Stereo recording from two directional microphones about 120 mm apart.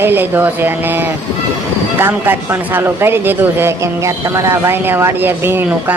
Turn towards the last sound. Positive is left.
turn(degrees=-20)  # may be behind; listen again after turning